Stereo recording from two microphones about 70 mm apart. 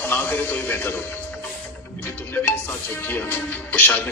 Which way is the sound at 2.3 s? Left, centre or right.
Left.